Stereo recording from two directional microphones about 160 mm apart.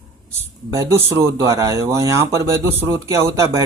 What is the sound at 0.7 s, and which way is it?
Speech, 20° right (ahead or behind).